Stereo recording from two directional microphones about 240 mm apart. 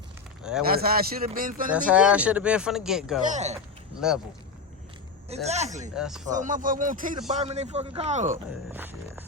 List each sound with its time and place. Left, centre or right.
0.7 s speech: right
1.9 s speech: centre
3.2 s speech: right
4.0 s speech: centre
5.3 s speech: right
5.9 s speech: centre
6.2 s speech: right
8.7 s a sound: centre